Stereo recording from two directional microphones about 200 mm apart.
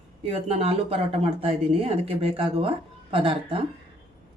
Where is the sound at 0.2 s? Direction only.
30° right (ahead or behind).